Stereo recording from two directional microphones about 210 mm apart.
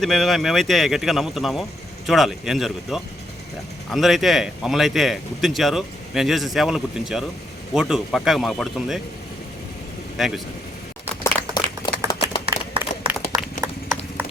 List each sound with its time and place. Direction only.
0.0 s speech: centre (ahead or behind)
10.2 s speech: centre (ahead or behind)
11.2 s a sound: 15° left (ahead or behind)
13.1 s run: centre (ahead or behind)
13.6 s clip-clop: 15° right (ahead or behind)